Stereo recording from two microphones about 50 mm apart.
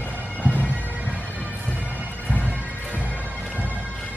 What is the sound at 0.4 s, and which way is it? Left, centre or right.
Bagpipes, left.